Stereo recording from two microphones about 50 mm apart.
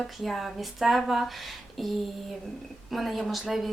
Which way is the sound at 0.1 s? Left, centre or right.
Centre.